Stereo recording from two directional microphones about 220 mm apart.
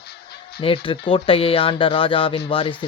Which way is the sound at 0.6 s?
25° left (ahead or behind).